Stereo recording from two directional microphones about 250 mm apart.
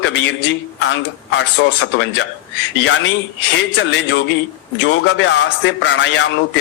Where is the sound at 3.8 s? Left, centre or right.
Left.